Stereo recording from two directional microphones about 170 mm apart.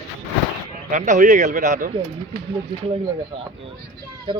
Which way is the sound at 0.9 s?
45° right (ahead or behind).